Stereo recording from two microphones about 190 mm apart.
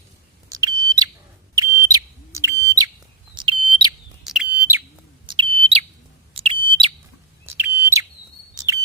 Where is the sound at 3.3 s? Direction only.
25° right (ahead or behind).